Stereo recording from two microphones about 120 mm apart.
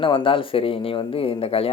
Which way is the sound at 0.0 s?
45° left (ahead or behind).